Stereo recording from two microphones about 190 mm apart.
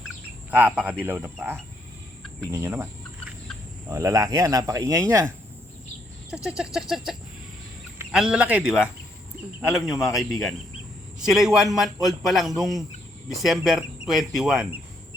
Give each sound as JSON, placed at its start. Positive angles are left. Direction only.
{"t": 0.5, "sound": "speech", "side_deg": -10}
{"t": 2.5, "sound": "speech", "side_deg": -15}
{"t": 3.8, "sound": "speech", "side_deg": -15}
{"t": 6.3, "sound": "speech", "side_deg": -5}